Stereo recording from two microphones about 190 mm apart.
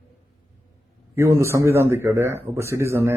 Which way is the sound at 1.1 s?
15° right (ahead or behind).